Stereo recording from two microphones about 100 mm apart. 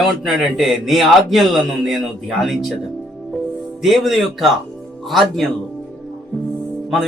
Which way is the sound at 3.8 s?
Centre (ahead or behind).